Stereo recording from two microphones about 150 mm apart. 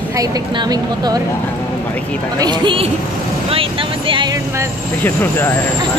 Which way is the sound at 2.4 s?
30° right (ahead or behind).